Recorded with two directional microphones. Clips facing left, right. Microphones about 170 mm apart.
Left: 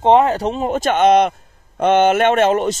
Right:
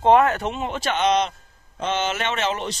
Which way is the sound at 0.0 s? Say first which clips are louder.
Left 4 dB; 25° left (ahead or behind).